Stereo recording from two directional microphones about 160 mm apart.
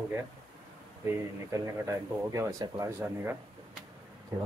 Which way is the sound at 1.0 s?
20° right (ahead or behind).